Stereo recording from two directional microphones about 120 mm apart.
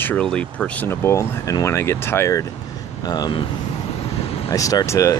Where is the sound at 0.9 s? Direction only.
25° left (ahead or behind).